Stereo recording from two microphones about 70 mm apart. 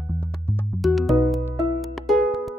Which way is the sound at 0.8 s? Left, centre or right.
Centre.